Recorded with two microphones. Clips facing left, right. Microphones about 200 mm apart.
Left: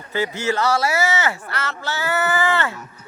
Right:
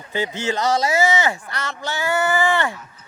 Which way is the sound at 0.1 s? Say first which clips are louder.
Left 1 dB; 15° right (ahead or behind).